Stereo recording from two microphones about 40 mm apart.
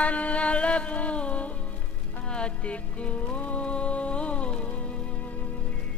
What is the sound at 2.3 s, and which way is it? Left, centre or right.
Music, left.